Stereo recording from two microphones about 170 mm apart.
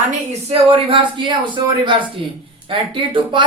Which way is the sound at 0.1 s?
35° right (ahead or behind).